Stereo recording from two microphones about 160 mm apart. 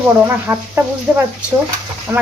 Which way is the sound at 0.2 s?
15° right (ahead or behind).